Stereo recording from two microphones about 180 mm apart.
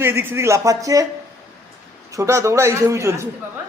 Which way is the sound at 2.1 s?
15° right (ahead or behind).